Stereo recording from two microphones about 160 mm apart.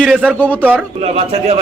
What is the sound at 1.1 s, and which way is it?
Speech, 40° right (ahead or behind).